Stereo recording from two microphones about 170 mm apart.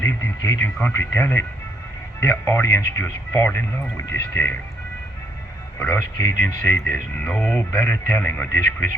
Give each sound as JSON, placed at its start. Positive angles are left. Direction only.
{"t": 0.0, "sound": "speech", "side_deg": 15}
{"t": 5.8, "sound": "speech", "side_deg": 15}
{"t": 7.2, "sound": "speech", "side_deg": 5}